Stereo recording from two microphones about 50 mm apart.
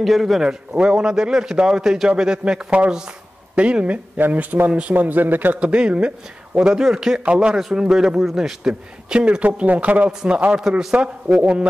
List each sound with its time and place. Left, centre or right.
0.0 s a man's voice: centre
0.4 s a man's voice: centre
4.9 s speech: right
5.6 s a man's voice: right
9.2 s a man's voice: right